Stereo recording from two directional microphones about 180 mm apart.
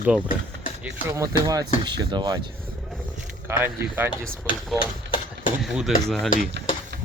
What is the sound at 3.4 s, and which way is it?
Speech, 15° right (ahead or behind).